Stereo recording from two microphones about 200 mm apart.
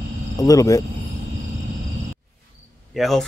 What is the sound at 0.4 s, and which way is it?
Speech, 15° left (ahead or behind).